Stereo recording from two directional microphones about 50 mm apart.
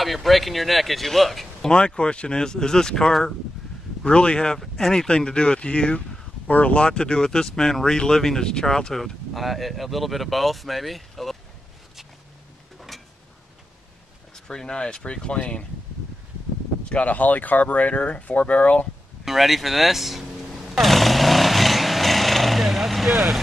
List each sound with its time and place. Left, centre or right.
0.0 s speech: centre
1.7 s speech: centre
4.0 s speech: centre
12.9 s a sound: centre
14.3 s speech: centre
16.8 s speech: left
19.2 s speech: centre
20.7 s vehicle: centre